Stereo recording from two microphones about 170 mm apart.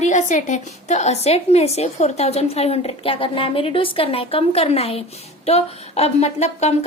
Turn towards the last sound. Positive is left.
turn(degrees=40)  # may be behind; listen again after turning